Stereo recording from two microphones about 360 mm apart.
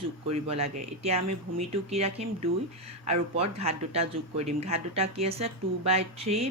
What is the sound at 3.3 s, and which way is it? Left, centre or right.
Speech, centre.